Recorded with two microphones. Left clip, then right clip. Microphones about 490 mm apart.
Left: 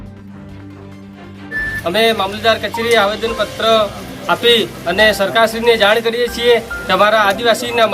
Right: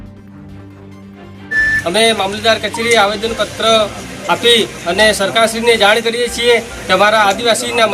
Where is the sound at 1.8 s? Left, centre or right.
Left.